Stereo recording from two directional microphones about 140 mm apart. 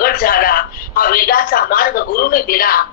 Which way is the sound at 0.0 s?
90° left.